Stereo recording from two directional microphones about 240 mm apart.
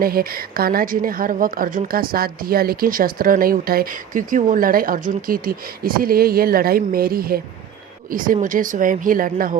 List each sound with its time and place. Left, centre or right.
0.0 s a woman's voice: right